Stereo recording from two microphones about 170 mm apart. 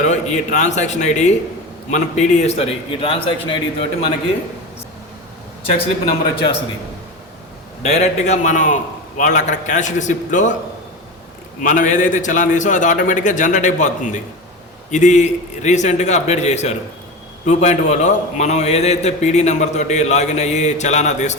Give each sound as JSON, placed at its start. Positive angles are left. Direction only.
{"t": 0.1, "sound": "a man's voice", "side_deg": 45}
{"t": 5.6, "sound": "a man's voice", "side_deg": 35}
{"t": 7.8, "sound": "a man's voice", "side_deg": 40}
{"t": 11.6, "sound": "a man's voice", "side_deg": 50}